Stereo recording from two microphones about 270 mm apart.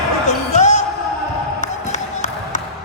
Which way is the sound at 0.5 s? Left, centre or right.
Left.